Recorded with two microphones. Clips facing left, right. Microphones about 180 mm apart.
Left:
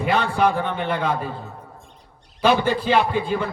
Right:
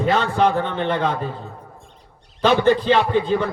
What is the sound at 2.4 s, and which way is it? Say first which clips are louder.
Speech: right 3 dB; 10° left (ahead or behind).